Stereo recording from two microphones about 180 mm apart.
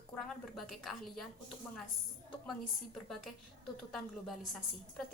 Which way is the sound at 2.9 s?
Centre (ahead or behind).